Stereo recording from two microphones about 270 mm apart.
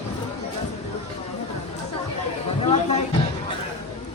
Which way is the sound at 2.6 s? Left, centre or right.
Left.